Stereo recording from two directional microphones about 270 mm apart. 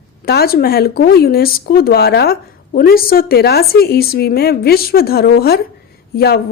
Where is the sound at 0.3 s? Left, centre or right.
Left.